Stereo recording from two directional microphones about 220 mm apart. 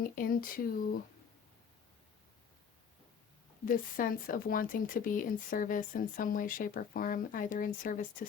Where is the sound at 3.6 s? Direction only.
40° left (ahead or behind).